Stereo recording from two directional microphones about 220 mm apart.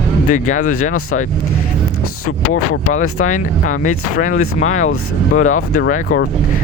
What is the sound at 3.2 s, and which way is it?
Speech, 35° left (ahead or behind).